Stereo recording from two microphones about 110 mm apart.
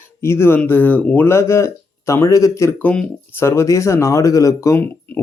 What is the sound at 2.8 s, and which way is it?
Speech, 10° left (ahead or behind).